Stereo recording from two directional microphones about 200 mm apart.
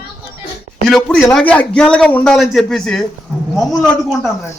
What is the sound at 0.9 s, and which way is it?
A man's voice, centre (ahead or behind).